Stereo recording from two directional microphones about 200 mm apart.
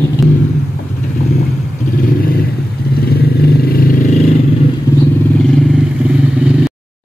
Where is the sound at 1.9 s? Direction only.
45° left (ahead or behind).